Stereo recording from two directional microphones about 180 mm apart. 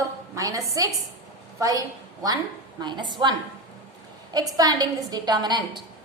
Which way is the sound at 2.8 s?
25° right (ahead or behind).